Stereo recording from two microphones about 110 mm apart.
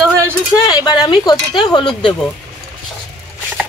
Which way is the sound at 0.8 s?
40° left (ahead or behind).